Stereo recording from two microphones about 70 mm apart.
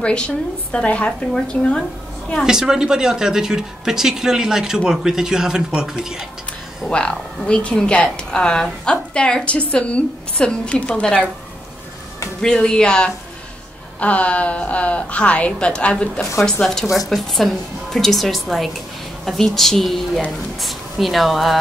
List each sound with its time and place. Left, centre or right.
0.0 s a woman's voice: centre
2.4 s speech: centre
6.9 s a woman's voice: centre
12.4 s a woman's voice: centre
16.6 s a woman's voice: centre